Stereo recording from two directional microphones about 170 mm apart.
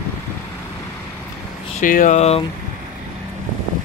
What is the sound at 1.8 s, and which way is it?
Speech, 50° left (ahead or behind).